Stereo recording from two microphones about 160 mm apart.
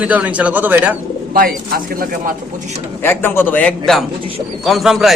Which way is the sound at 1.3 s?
65° right (ahead or behind).